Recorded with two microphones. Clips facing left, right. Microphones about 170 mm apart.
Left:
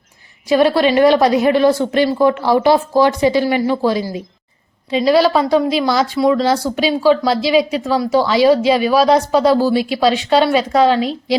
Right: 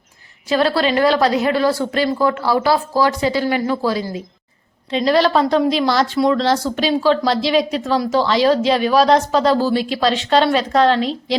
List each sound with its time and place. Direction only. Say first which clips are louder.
0.4 s speech: left 4 dB; 15° left (ahead or behind)
4.9 s a woman's voice: left 3 dB; 10° left (ahead or behind)